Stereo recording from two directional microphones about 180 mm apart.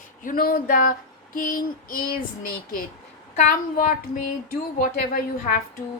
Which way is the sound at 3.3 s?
45° left (ahead or behind).